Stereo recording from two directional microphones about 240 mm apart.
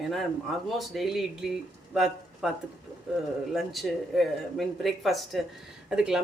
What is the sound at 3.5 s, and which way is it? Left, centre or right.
Speech, centre.